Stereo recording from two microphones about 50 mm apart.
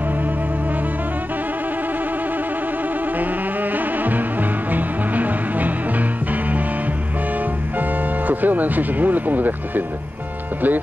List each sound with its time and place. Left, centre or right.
3.7 s music: right
8.3 s speech: right